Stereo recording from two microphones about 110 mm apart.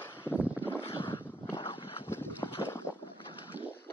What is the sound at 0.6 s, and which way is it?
Boat, 20° left (ahead or behind).